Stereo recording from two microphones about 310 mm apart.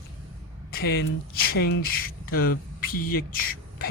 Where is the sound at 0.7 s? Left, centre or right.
Left.